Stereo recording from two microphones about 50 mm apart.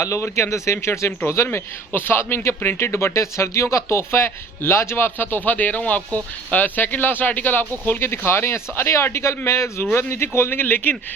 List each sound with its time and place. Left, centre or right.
0.0 s speech: left
1.9 s a man's voice: left
7.9 s speech: left
9.8 s a man's voice: left
10.1 s a man's voice: left